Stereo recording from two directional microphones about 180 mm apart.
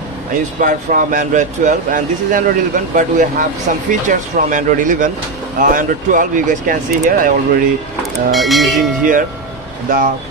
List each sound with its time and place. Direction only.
0.6 s speech: 45° right (ahead or behind)
8.3 s speech: centre (ahead or behind)
9.8 s speech: 50° right (ahead or behind)